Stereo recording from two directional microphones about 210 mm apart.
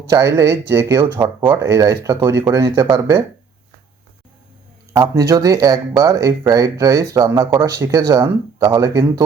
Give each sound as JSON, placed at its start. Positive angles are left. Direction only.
{"t": 0.1, "sound": "speech", "side_deg": -15}
{"t": 4.9, "sound": "speech", "side_deg": -15}